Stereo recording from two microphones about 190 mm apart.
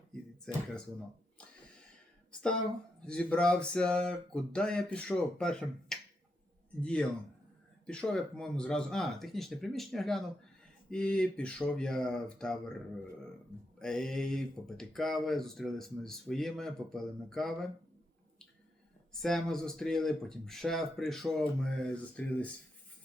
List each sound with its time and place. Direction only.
0.1 s a sound: 5° left (ahead or behind)
3.0 s speech: 5° left (ahead or behind)
13.7 s speech: 5° left (ahead or behind)
19.1 s speech: centre (ahead or behind)